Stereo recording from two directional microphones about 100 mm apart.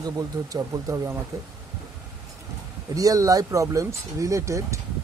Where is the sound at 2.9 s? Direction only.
35° right (ahead or behind).